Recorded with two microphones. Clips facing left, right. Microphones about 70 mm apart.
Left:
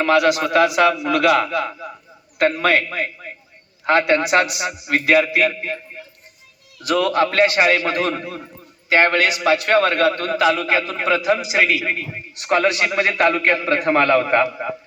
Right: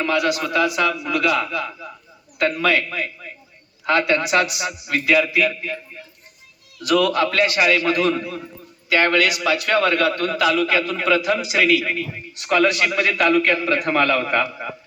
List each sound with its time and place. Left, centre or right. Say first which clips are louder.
0.0 s a man's voice: left 5 dB; left
0.5 s a man's voice: left 5 dB; left
1.4 s a man's voice: left 4 dB; left
5.5 s a man's voice: left 1 dB; left
6.8 s a man's voice: even; left